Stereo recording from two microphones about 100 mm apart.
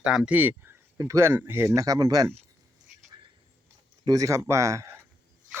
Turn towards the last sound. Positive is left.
turn(degrees=-30)  # may be behind; listen again after turning